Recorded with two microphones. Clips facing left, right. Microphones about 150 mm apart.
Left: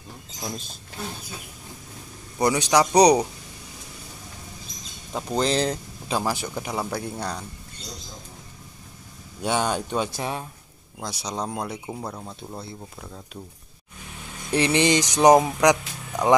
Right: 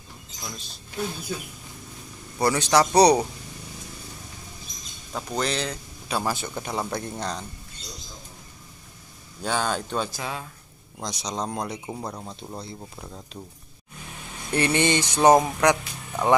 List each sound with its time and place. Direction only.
0.4 s speech: 40° left (ahead or behind)
2.3 s speech: 15° left (ahead or behind)
5.3 s speech: 30° left (ahead or behind)
6.1 s speech: 15° left (ahead or behind)
9.4 s speech: 20° left (ahead or behind)
11.0 s speech: 5° left (ahead or behind)
14.5 s speech: 15° left (ahead or behind)